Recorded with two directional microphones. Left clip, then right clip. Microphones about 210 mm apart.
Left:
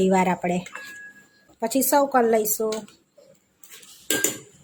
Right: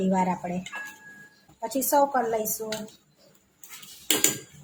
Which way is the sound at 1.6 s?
40° left (ahead or behind).